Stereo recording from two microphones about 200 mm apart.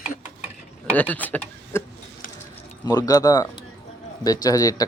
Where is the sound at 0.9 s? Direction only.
10° left (ahead or behind).